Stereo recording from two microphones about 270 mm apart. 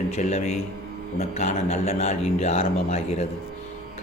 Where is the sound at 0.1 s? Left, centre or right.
Left.